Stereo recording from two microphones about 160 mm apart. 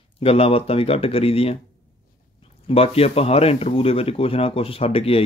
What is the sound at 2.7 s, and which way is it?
Speech, 40° left (ahead or behind).